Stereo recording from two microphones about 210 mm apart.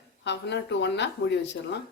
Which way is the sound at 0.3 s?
55° left (ahead or behind).